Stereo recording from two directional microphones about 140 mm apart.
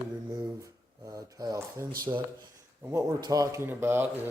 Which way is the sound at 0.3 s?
25° right (ahead or behind).